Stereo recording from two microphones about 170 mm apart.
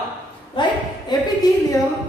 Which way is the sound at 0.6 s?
30° left (ahead or behind).